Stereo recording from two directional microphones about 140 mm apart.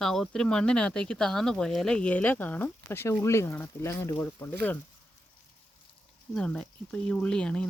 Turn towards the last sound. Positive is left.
turn(degrees=5)  # may be behind; listen again after turning